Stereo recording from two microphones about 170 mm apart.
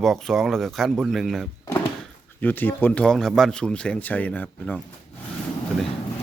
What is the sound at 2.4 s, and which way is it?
Speech, 10° left (ahead or behind).